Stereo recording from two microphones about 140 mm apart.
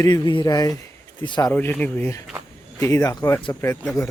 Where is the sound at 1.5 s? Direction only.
15° left (ahead or behind).